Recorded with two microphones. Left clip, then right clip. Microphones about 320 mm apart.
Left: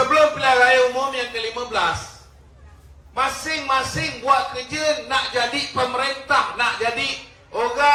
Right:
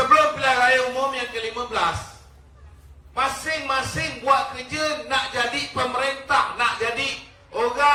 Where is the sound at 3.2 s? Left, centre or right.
Left.